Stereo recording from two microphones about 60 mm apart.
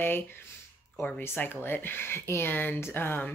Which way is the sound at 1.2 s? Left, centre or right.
Left.